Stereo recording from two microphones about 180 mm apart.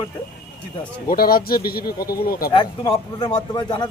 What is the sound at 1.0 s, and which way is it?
Speech, 55° left (ahead or behind).